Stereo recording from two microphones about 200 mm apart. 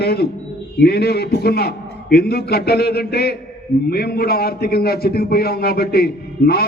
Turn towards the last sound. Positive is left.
turn(degrees=50)  # may be behind; listen again after turning